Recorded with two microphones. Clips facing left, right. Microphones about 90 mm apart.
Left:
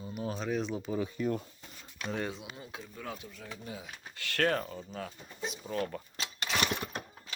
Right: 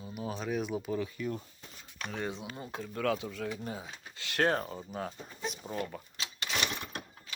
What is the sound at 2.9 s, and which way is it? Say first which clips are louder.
Speech: right 13 dB; 90° right.